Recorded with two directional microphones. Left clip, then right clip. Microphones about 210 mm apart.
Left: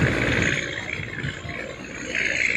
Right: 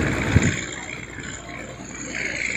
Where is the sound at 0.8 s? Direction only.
55° right (ahead or behind).